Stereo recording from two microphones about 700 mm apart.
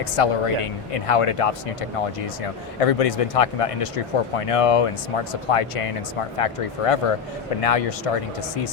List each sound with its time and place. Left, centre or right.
0.0 s speech: left